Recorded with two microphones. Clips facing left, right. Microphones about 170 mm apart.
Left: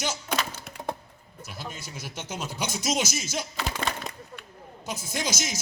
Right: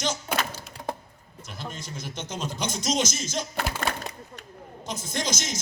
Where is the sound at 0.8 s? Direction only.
20° left (ahead or behind).